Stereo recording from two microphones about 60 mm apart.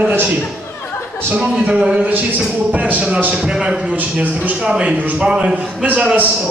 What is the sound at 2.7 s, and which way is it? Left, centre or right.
Speech, right.